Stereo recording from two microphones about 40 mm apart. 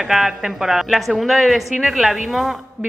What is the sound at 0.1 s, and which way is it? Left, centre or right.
A woman's voice, centre.